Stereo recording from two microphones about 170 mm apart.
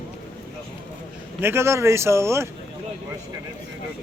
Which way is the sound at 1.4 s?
15° right (ahead or behind).